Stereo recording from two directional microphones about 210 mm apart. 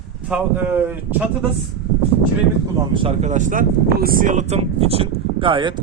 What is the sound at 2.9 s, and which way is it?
Speech, 25° right (ahead or behind).